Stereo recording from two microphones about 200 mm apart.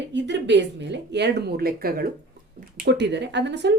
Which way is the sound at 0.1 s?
60° right (ahead or behind).